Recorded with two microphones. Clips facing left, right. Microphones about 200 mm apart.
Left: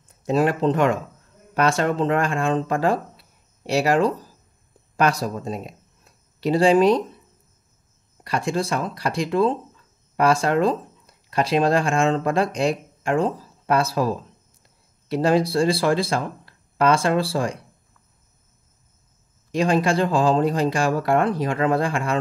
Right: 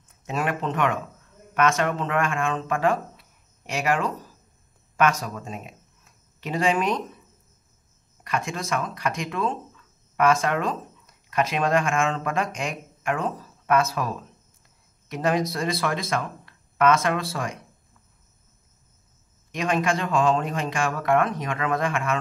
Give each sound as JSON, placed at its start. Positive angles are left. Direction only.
{"t": 0.1, "sound": "speech", "side_deg": 35}
{"t": 8.2, "sound": "speech", "side_deg": 35}
{"t": 19.5, "sound": "speech", "side_deg": 35}